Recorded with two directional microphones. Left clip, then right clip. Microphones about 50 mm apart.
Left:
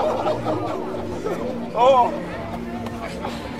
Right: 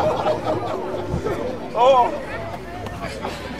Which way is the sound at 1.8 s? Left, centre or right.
Centre.